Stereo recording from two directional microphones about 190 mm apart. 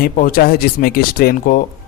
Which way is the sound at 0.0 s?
50° left (ahead or behind).